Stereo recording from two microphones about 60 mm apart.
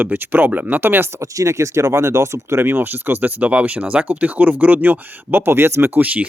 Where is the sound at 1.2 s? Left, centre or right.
Right.